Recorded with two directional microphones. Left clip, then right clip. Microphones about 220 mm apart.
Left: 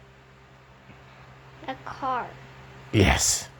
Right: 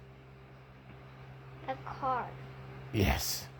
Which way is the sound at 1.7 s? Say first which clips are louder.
Left 5 dB; 40° left (ahead or behind).